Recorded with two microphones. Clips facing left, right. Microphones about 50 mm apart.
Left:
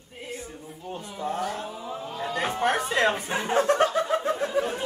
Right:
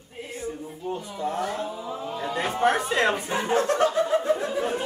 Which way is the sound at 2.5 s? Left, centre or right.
Right.